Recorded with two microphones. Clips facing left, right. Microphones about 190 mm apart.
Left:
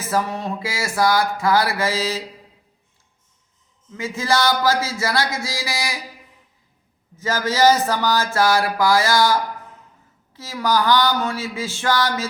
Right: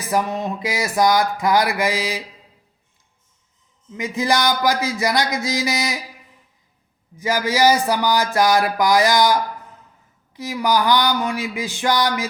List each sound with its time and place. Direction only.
0.0 s speech: 15° right (ahead or behind)
3.9 s speech: 15° right (ahead or behind)
7.2 s speech: 15° right (ahead or behind)